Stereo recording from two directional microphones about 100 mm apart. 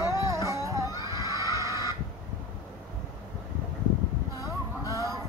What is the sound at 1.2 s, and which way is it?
Neigh, 30° right (ahead or behind).